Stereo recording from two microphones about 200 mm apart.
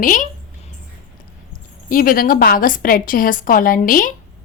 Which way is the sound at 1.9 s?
45° left (ahead or behind).